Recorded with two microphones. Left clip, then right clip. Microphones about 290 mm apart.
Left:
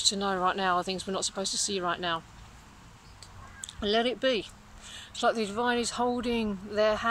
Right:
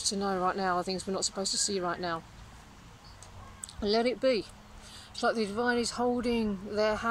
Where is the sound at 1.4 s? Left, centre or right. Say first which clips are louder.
Even; right.